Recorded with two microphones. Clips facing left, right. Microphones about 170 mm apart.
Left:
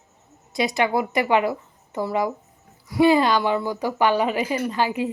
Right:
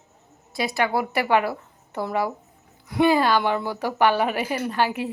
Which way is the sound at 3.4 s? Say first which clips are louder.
Left 2 dB; 10° left (ahead or behind).